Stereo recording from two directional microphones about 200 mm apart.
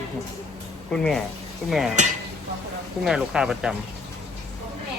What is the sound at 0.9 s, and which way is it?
Speech, 5° left (ahead or behind).